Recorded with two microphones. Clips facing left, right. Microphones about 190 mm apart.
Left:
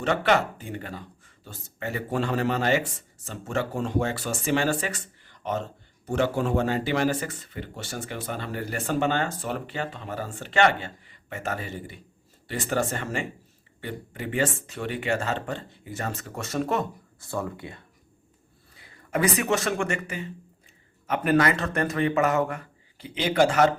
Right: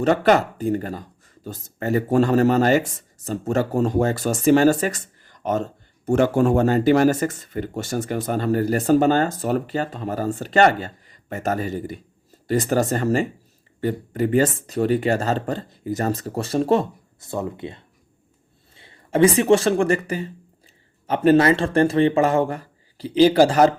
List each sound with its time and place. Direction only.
0.0 s speech: 40° right (ahead or behind)
17.2 s speech: 20° right (ahead or behind)